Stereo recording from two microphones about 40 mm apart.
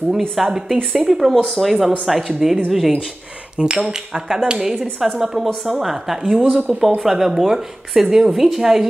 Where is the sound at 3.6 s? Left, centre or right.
Centre.